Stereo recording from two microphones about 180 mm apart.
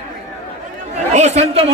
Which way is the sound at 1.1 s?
40° right (ahead or behind).